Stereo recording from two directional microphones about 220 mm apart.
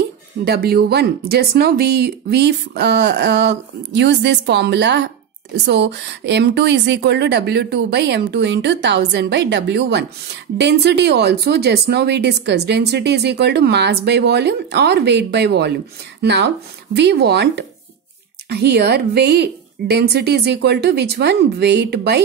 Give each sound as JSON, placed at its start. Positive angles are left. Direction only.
{"t": 0.5, "sound": "speech", "side_deg": -45}